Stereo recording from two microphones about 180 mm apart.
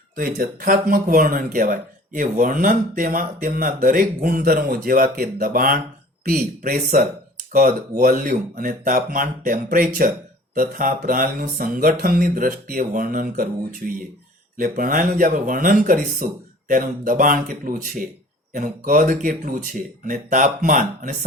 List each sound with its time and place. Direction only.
0.2 s speech: 55° right (ahead or behind)